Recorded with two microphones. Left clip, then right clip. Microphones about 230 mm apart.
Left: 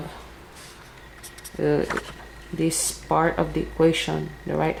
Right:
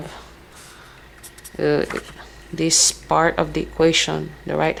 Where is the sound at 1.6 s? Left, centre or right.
Centre.